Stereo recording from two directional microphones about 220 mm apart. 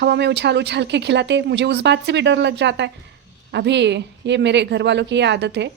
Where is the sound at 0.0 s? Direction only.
50° right (ahead or behind).